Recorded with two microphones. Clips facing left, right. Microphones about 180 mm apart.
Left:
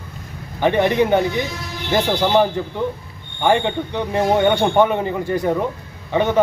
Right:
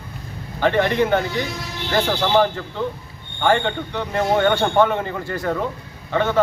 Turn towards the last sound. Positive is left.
turn(degrees=15)  # may be behind; listen again after turning